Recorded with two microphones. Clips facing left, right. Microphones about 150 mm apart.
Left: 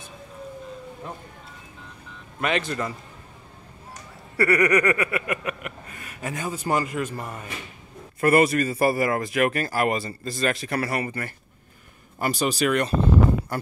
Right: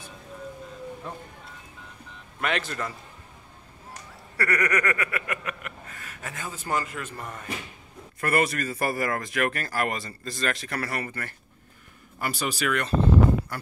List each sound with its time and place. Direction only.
2.4 s a man's voice: centre (ahead or behind)
4.4 s a man's voice: 10° left (ahead or behind)